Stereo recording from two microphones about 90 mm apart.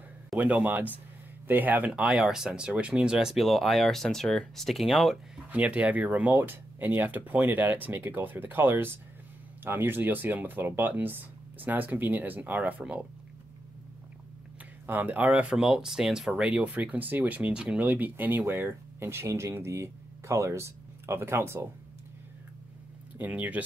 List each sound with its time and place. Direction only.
0.4 s speech: 15° right (ahead or behind)
1.9 s speech: 10° right (ahead or behind)
5.5 s speech: 15° right (ahead or behind)
14.9 s speech: 20° right (ahead or behind)
23.1 s speech: 20° right (ahead or behind)